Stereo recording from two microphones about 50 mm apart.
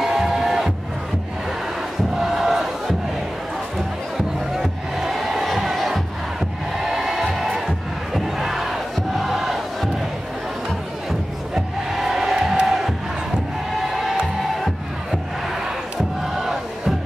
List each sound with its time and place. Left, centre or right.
0.0 s music: centre
2.1 s crowd: centre
4.6 s music: centre
8.1 s crowd: centre
11.1 s music: centre
12.6 s crowd: centre
13.7 s music: centre